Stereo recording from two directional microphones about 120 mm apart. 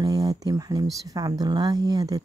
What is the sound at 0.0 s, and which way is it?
Speech, 30° right (ahead or behind).